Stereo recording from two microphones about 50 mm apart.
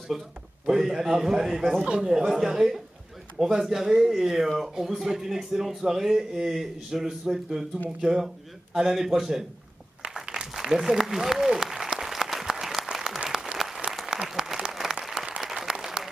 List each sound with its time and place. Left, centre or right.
0.7 s speech: centre
10.2 s applause: centre